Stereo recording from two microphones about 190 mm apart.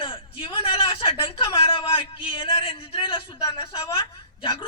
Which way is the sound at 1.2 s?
25° left (ahead or behind).